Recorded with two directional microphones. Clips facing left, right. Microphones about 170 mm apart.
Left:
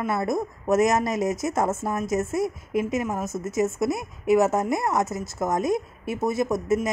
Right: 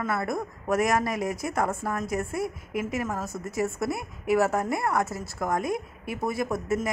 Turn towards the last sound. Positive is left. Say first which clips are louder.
# left 4 dB
turn(degrees=20)  # may be behind; listen again after turning